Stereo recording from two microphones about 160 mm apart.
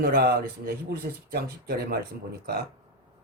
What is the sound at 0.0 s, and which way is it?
A man's voice, 80° right.